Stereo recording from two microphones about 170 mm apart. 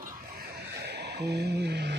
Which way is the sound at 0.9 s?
80° right.